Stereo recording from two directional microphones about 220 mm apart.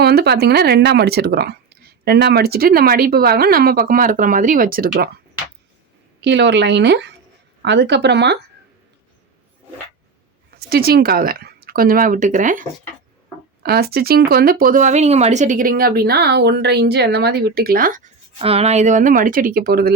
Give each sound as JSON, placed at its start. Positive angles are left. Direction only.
{"t": 0.0, "sound": "speech", "side_deg": -45}
{"t": 6.1, "sound": "speech", "side_deg": -50}
{"t": 10.7, "sound": "speech", "side_deg": -45}
{"t": 18.3, "sound": "speech", "side_deg": -25}